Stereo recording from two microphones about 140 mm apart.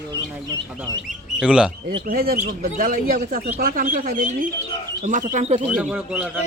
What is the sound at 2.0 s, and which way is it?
Speech, 90° right.